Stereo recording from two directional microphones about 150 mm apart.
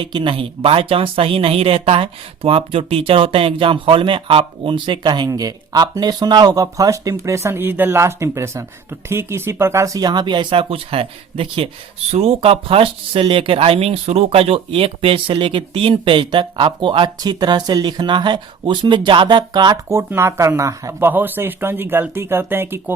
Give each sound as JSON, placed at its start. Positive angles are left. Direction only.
{"t": 0.0, "sound": "speech", "side_deg": -35}